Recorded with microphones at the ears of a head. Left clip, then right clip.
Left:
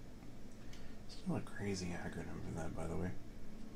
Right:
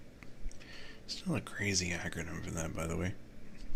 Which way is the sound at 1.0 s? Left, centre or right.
Right.